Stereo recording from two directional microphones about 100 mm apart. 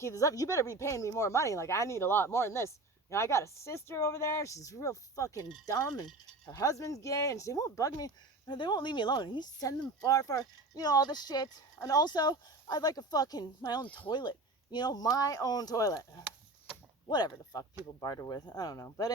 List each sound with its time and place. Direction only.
0.0 s speech: 30° left (ahead or behind)
13.8 s speech: 15° left (ahead or behind)
14.1 s speech: 50° left (ahead or behind)
17.1 s speech: 45° left (ahead or behind)